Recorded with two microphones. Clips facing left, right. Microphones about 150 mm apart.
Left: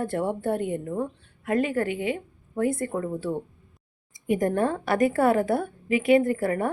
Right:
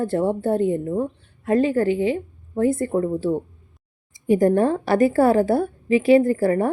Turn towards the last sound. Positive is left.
turn(degrees=-30)  # may be behind; listen again after turning